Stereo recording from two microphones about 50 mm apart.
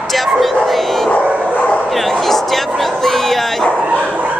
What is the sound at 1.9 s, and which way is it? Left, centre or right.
Speech, centre.